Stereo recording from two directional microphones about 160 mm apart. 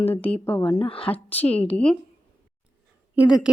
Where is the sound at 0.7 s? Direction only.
35° left (ahead or behind).